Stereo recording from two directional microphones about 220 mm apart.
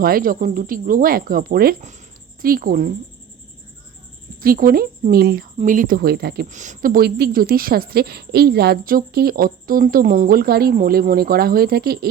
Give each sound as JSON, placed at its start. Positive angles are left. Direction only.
{"t": 0.0, "sound": "speech", "side_deg": -40}
{"t": 4.4, "sound": "a woman's voice", "side_deg": -40}